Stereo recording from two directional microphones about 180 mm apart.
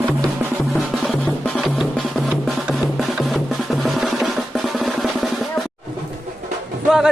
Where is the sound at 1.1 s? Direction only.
Centre (ahead or behind).